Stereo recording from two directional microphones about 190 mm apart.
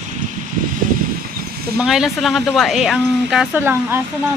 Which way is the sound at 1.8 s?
5° right (ahead or behind).